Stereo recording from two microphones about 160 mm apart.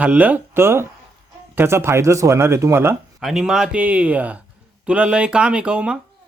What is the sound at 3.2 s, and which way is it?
Speech, centre (ahead or behind).